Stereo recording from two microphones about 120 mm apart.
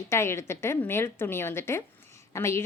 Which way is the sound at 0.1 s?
20° left (ahead or behind).